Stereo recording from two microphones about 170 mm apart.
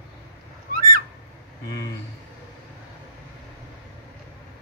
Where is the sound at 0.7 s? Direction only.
55° right (ahead or behind).